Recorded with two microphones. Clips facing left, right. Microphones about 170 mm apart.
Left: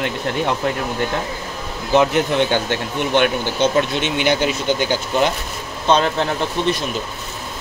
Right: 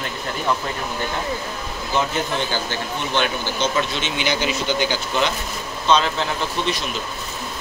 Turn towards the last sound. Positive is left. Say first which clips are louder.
# left 4 dB
turn(degrees=55)  # may be behind; listen again after turning